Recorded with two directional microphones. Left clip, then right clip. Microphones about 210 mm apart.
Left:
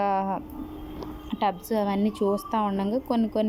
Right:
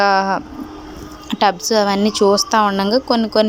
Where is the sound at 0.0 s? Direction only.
5° right (ahead or behind).